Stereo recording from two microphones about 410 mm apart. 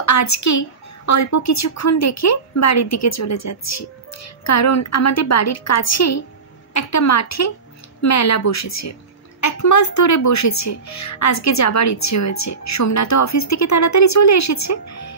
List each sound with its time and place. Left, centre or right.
0.0 s a woman's voice: left